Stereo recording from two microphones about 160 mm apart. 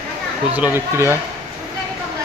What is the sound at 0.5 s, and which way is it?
Speech, 10° right (ahead or behind).